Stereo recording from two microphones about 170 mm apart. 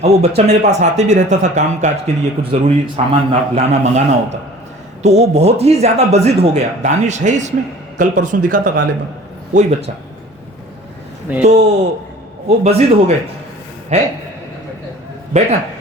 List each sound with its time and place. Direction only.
0.0 s speech: 40° right (ahead or behind); by 8.8 s 55° right (ahead or behind)
9.6 s speech: 40° right (ahead or behind)
11.4 s speech: 40° right (ahead or behind)